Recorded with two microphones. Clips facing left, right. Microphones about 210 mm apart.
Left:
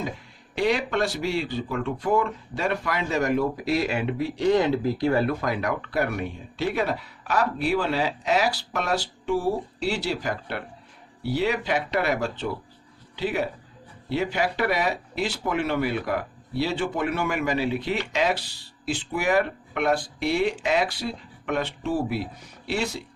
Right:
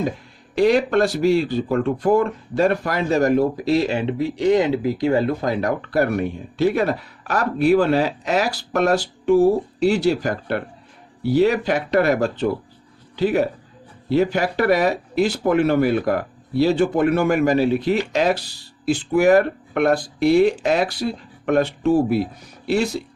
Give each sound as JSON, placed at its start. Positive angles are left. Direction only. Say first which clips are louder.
{"t": 0.5, "sound": "speech", "louder": "right 8 dB", "side_deg": -40}